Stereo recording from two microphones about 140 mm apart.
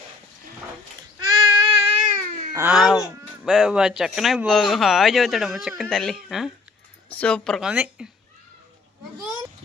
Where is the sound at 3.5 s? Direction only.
5° right (ahead or behind).